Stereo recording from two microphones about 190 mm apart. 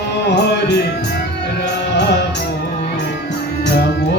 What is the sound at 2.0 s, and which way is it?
Music, 65° left (ahead or behind).